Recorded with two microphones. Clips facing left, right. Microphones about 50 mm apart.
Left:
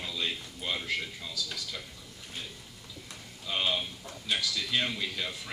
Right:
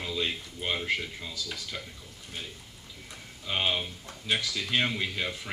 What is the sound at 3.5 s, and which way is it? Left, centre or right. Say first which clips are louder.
Speech: right 2 dB; right.